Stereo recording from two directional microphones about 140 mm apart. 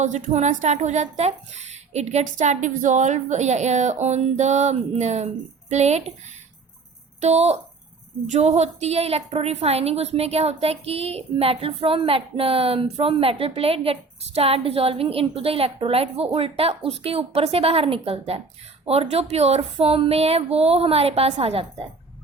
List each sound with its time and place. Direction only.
0.0 s a woman's voice: 60° right (ahead or behind); by 21.7 s 40° right (ahead or behind)